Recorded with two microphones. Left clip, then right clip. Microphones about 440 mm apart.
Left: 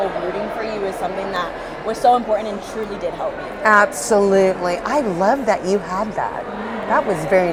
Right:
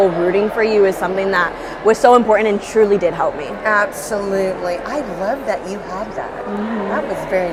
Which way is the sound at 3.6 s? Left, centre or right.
Left.